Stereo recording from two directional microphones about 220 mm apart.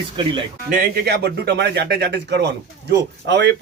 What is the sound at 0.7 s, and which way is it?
Speech, 45° right (ahead or behind).